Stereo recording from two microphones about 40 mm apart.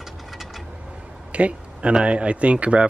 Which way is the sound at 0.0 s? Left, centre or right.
Centre.